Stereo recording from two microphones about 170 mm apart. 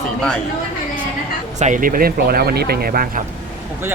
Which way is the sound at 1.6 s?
50° right (ahead or behind).